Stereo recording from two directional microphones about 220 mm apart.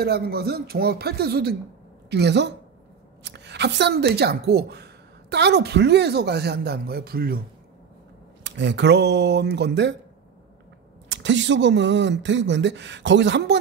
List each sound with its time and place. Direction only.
0.0 s a woman's voice: 45° right (ahead or behind)
8.5 s a woman's voice: 50° right (ahead or behind)
11.1 s speech: 55° right (ahead or behind)